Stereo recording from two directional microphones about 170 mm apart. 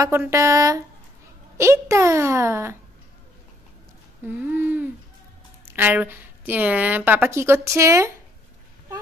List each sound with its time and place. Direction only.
0.0 s a woman's voice: 15° right (ahead or behind)
4.3 s a woman's voice: 10° right (ahead or behind)